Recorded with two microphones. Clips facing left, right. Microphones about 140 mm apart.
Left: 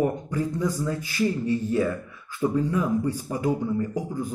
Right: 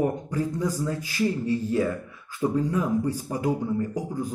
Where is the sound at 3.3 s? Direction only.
35° right (ahead or behind).